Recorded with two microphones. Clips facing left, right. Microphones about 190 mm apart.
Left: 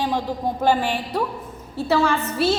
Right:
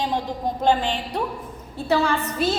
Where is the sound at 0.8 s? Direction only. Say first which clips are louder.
Left 2 dB; 10° left (ahead or behind).